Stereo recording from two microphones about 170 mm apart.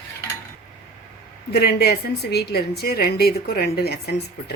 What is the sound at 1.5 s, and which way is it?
A woman's voice, 70° left (ahead or behind).